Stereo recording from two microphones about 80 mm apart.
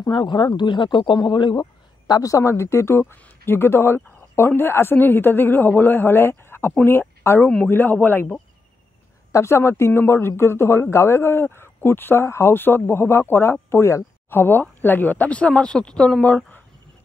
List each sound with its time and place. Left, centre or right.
0.0 s speech: left
1.6 s speech: left
9.3 s speech: left; by 16.3 s centre